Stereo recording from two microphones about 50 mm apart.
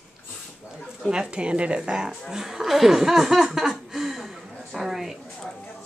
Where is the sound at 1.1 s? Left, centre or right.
Centre.